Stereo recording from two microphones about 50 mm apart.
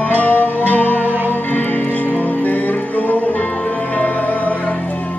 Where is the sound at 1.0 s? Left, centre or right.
Right.